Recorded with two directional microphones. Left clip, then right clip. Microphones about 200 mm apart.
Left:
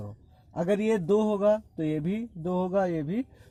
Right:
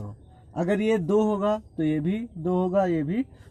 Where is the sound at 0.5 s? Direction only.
40° left (ahead or behind).